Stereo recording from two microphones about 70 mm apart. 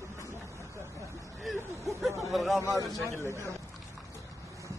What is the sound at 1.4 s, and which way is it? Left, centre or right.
Speech, centre.